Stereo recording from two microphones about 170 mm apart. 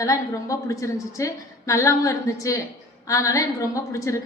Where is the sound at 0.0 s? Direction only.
20° left (ahead or behind).